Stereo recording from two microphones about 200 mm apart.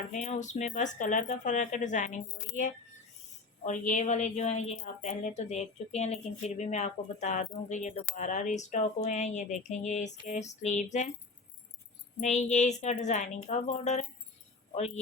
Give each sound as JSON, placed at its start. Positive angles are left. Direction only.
{"t": 0.1, "sound": "a woman's voice", "side_deg": 35}
{"t": 12.2, "sound": "a woman's voice", "side_deg": 35}